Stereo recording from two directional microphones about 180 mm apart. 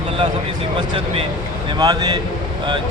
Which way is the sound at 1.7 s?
20° right (ahead or behind).